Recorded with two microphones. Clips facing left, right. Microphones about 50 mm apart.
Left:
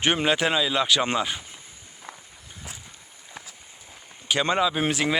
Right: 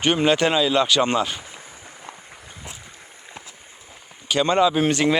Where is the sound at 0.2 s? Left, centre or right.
Centre.